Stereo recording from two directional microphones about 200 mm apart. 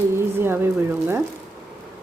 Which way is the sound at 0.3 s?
10° right (ahead or behind).